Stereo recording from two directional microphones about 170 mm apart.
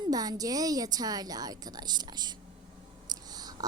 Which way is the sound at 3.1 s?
25° right (ahead or behind).